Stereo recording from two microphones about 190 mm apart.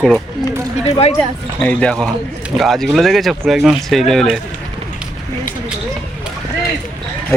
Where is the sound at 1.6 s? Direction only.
5° left (ahead or behind).